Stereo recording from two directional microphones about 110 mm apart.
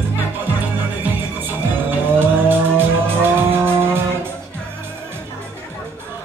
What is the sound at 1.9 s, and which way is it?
Music, 20° right (ahead or behind).